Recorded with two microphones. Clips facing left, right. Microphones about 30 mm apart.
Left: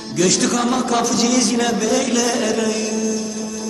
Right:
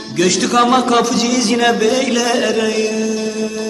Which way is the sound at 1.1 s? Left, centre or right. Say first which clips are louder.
Right 1 dB; centre.